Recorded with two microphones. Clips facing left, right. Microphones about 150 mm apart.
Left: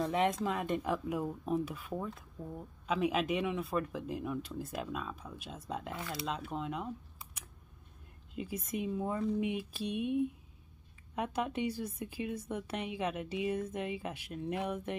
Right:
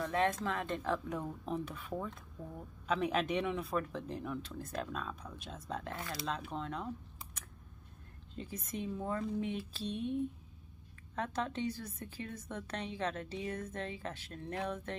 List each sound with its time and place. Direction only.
0.0 s speech: 15° left (ahead or behind)
8.4 s speech: 10° left (ahead or behind)